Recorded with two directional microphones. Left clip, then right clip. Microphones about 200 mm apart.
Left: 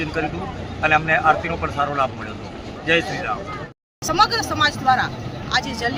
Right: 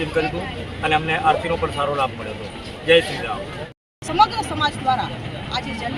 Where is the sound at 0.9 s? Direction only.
5° left (ahead or behind).